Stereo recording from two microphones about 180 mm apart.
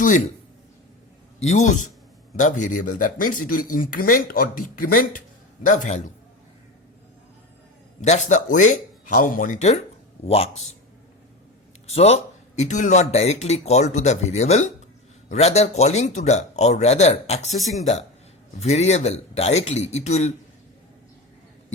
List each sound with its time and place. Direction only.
1.4 s speech: 40° left (ahead or behind)
8.0 s speech: 40° left (ahead or behind)
11.9 s speech: 35° left (ahead or behind)
18.6 s speech: 40° left (ahead or behind)